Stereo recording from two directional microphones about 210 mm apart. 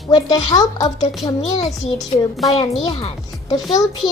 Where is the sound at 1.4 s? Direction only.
Centre (ahead or behind).